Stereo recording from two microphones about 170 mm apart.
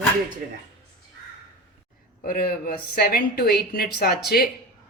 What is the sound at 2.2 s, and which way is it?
Speech, 60° left (ahead or behind).